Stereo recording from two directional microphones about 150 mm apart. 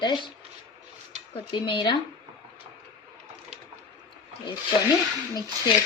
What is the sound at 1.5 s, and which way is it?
Speech, 30° left (ahead or behind).